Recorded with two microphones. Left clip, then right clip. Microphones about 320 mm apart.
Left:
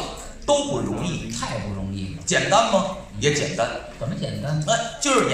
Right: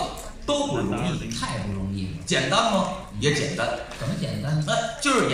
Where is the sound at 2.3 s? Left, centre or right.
Left.